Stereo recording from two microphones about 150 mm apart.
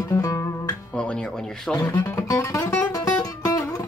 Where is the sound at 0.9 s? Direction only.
5° left (ahead or behind).